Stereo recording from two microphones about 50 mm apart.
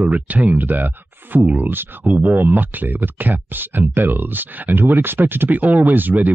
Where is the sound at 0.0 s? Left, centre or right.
Right.